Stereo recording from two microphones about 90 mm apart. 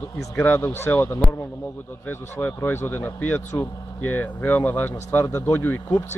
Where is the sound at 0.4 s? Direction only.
25° left (ahead or behind).